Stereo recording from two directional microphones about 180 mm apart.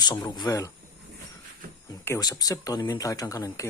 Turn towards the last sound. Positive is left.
turn(degrees=20)  # may be behind; listen again after turning